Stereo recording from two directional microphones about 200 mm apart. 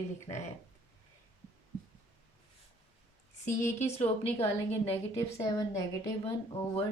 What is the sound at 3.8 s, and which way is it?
Speech, 30° left (ahead or behind).